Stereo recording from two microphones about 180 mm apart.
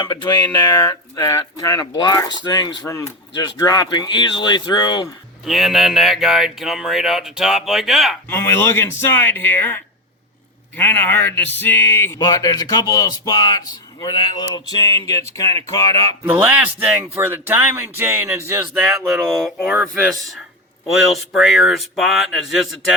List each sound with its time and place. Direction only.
0.0 s speech: 25° left (ahead or behind)
5.5 s speech: centre (ahead or behind)
8.3 s speech: 10° left (ahead or behind)
16.2 s speech: 10° right (ahead or behind)
18.8 s speech: centre (ahead or behind)